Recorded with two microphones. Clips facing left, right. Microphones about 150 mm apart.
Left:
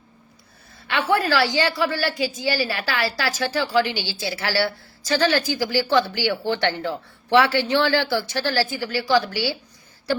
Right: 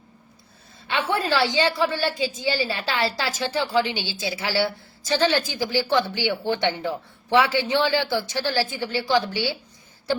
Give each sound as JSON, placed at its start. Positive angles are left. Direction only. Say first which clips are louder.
{"t": 0.9, "sound": "a woman's voice", "louder": "left 2 dB", "side_deg": -20}